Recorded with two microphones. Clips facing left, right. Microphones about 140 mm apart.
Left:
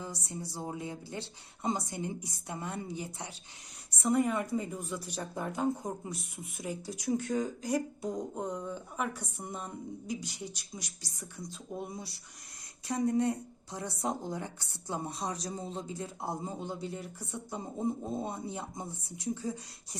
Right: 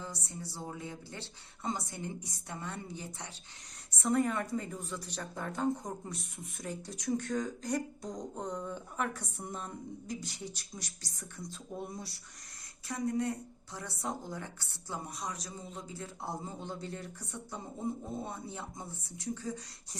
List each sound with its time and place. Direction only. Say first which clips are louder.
0.0 s a woman's voice: left 3 dB; 15° left (ahead or behind)
12.9 s a woman's voice: left 4 dB; 25° left (ahead or behind)